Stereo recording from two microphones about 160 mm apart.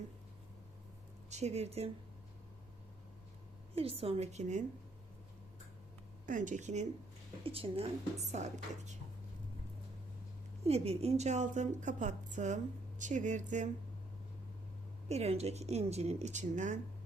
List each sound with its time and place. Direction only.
1.3 s speech: 45° right (ahead or behind)
3.8 s speech: 35° right (ahead or behind)
6.2 s a woman's voice: 55° right (ahead or behind)
7.4 s speech: 35° right (ahead or behind)
10.7 s a woman's voice: 40° right (ahead or behind)
15.1 s speech: 40° right (ahead or behind)